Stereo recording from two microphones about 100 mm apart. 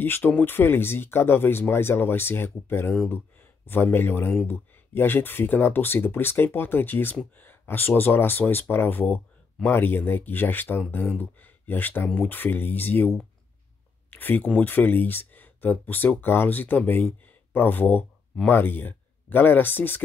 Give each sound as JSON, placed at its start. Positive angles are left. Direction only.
{"t": 0.0, "sound": "speech", "side_deg": 20}